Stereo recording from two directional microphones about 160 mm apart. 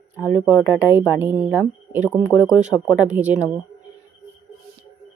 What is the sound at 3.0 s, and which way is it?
Speech, 10° right (ahead or behind).